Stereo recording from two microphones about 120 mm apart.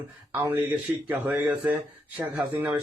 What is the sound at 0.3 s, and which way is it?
Speech, 15° right (ahead or behind).